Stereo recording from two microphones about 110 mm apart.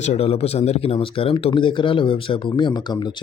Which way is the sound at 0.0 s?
75° left (ahead or behind).